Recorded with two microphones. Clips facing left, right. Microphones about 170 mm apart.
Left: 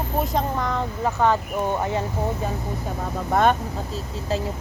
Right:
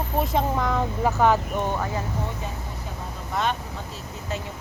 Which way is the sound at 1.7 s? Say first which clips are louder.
Left 4 dB; 25° left (ahead or behind).